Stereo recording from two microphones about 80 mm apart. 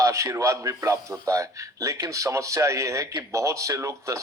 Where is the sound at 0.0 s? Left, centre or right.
Right.